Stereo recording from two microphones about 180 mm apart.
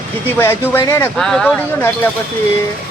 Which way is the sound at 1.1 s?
Centre (ahead or behind).